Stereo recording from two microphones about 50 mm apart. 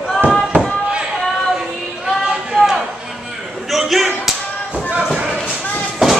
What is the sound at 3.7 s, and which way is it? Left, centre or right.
Slam, centre.